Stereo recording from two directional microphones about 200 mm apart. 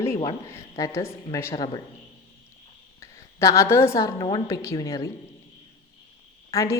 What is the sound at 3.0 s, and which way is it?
A woman's voice, 15° left (ahead or behind).